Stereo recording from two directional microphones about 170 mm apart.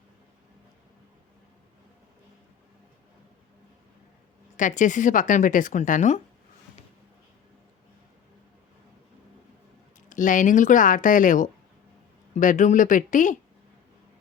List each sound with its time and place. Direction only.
4.5 s speech: 50° left (ahead or behind)
10.1 s speech: 50° left (ahead or behind)